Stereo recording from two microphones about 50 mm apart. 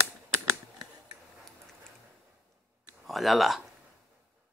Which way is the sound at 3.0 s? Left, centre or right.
Centre.